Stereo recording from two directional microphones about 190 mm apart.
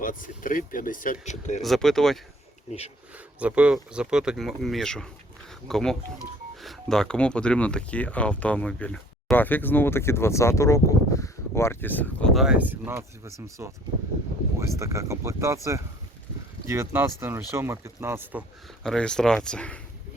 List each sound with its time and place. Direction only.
0.0 s speech: 45° left (ahead or behind)
1.6 s speech: centre (ahead or behind)
3.4 s speech: 5° right (ahead or behind)
18.8 s speech: 5° left (ahead or behind)